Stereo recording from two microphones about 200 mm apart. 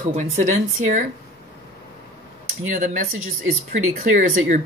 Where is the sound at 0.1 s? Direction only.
35° right (ahead or behind).